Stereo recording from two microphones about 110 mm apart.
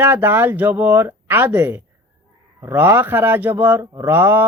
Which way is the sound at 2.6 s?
25° right (ahead or behind).